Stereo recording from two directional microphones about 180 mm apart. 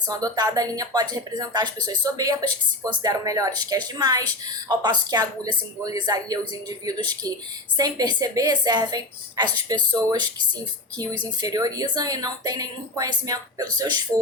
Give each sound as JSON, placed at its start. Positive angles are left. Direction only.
{"t": 0.1, "sound": "a woman's voice", "side_deg": -20}
{"t": 11.3, "sound": "a woman's voice", "side_deg": -20}